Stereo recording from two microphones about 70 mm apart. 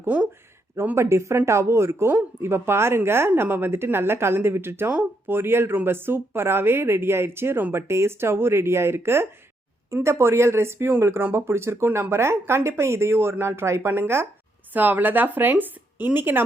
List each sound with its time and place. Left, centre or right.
0.1 s speech: right
0.9 s a woman's voice: right
14.7 s speech: right